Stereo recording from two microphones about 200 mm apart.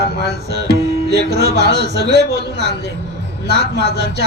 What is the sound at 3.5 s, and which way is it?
Music, 55° right (ahead or behind).